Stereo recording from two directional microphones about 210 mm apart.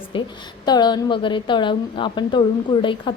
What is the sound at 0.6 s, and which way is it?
A woman's voice, 20° left (ahead or behind).